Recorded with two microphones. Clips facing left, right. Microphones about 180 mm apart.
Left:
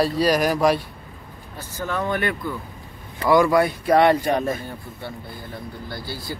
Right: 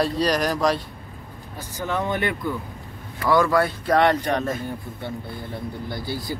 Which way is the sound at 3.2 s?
15° left (ahead or behind).